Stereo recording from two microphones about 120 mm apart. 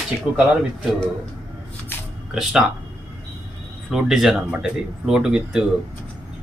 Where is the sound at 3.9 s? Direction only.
5° right (ahead or behind).